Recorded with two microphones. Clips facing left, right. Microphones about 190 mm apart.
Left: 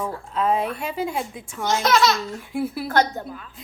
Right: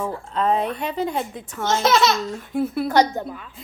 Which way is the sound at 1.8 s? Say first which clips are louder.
Right 1 dB; 25° right (ahead or behind).